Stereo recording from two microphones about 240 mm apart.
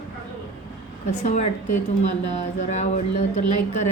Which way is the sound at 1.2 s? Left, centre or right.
Left.